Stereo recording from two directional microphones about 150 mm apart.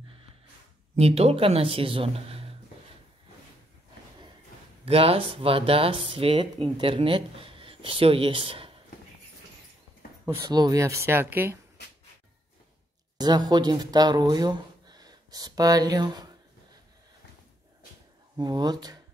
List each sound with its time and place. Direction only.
0.9 s speech: 45° right (ahead or behind)
4.8 s speech: 40° right (ahead or behind)
10.4 s speech: 25° right (ahead or behind)
13.2 s speech: 25° right (ahead or behind)
18.3 s speech: 25° right (ahead or behind)